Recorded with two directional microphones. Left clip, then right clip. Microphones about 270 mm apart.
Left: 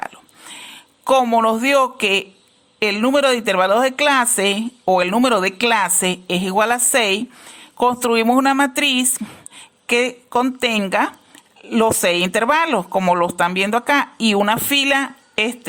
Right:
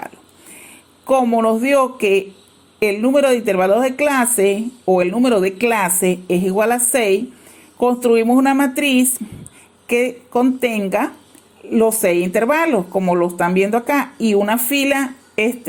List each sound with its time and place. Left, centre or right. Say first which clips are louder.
1.0 s a man's voice: even; left
2.8 s speech: right 1 dB; left